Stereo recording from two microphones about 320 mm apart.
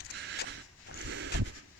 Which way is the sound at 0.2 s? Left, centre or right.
Right.